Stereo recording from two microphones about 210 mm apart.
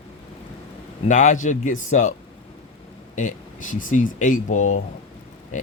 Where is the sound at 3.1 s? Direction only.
40° left (ahead or behind).